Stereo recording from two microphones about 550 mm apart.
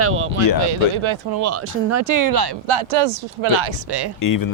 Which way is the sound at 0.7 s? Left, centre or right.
Right.